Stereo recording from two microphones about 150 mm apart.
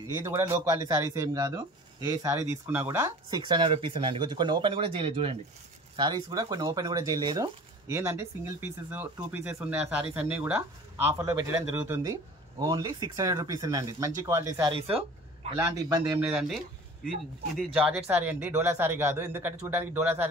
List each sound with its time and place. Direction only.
0.1 s speech: 25° right (ahead or behind)
7.9 s speech: 15° right (ahead or behind)
14.8 s speech: 40° right (ahead or behind)
15.5 s speech: 15° right (ahead or behind)
17.8 s speech: 5° right (ahead or behind)